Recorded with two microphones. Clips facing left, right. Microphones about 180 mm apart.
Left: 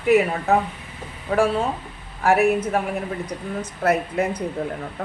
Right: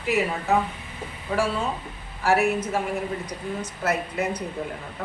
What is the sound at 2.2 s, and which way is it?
Speech, 55° left (ahead or behind).